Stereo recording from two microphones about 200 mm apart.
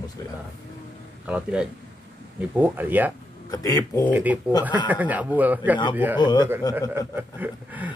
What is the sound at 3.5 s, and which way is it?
Speech, 20° left (ahead or behind).